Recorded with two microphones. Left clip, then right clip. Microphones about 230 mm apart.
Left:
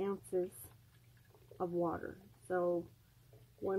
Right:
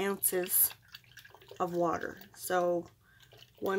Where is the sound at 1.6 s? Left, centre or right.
Centre.